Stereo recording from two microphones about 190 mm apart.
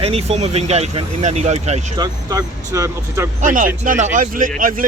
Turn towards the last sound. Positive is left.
turn(degrees=-45)  # may be behind; listen again after turning